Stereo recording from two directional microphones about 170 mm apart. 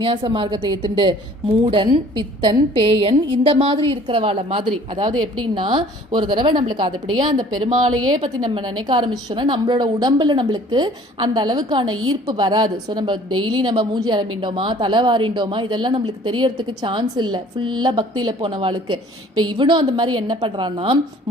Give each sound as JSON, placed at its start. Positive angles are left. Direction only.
{"t": 0.0, "sound": "a woman's voice", "side_deg": -30}